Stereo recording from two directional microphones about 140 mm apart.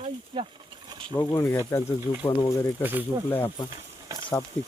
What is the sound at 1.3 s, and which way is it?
Speech, 20° left (ahead or behind).